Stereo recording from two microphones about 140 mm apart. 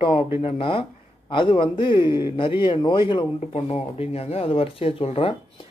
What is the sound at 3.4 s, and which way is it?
Speech, 45° left (ahead or behind).